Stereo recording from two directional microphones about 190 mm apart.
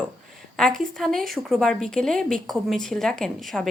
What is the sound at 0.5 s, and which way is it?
A woman's voice, centre (ahead or behind).